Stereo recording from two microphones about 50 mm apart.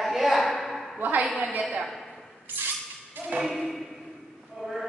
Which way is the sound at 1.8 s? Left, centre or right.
Centre.